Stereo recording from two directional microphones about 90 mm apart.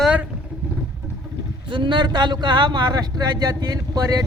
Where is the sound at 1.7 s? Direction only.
65° right (ahead or behind); by 4.2 s 45° right (ahead or behind).